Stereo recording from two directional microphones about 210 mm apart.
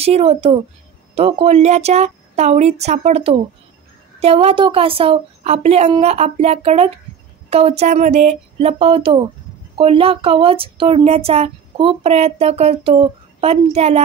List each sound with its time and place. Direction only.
0.0 s a woman's voice: 30° right (ahead or behind)